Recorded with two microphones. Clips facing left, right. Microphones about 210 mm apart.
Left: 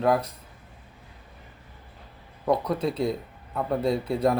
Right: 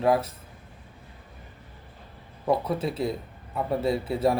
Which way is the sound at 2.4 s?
5° right (ahead or behind).